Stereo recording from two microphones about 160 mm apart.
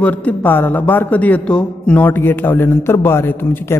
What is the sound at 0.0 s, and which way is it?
Speech, 10° left (ahead or behind).